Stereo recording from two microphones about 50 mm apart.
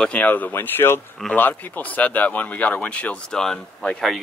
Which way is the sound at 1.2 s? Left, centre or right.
Centre.